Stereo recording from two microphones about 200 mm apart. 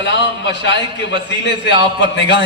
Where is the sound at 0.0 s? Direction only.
60° left (ahead or behind).